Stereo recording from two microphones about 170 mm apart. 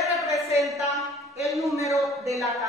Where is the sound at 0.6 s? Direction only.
Centre (ahead or behind).